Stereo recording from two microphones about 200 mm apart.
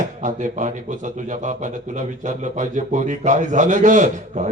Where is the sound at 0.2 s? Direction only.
40° right (ahead or behind).